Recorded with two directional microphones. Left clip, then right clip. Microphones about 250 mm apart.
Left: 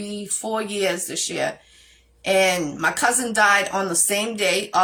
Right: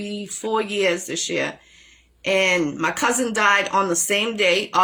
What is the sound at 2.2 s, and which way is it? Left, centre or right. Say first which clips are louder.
Speech: even; centre.